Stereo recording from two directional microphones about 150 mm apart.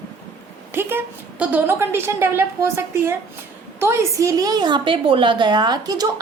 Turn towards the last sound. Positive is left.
turn(degrees=-25)  # may be behind; listen again after turning